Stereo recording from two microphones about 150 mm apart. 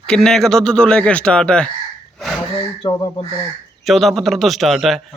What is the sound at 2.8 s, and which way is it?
Speech, 30° left (ahead or behind).